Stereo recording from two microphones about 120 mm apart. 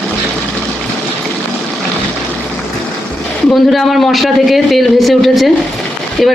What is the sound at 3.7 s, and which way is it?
Speech, centre (ahead or behind).